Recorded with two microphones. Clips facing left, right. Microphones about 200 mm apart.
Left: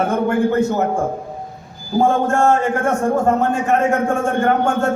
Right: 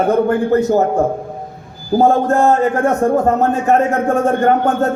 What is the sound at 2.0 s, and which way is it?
A man's voice, 40° right (ahead or behind).